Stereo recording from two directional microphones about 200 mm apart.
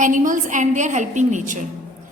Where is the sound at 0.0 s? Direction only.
40° right (ahead or behind).